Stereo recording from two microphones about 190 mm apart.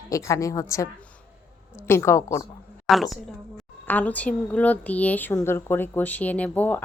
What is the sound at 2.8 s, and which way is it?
A woman's voice, centre (ahead or behind).